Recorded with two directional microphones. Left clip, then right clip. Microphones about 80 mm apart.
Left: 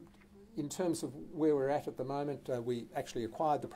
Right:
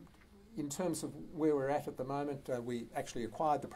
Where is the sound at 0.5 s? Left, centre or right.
Left.